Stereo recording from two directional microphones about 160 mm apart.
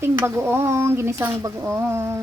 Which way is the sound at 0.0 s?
15° right (ahead or behind).